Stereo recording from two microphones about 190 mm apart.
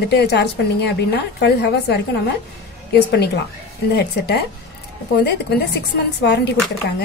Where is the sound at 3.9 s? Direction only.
60° left (ahead or behind).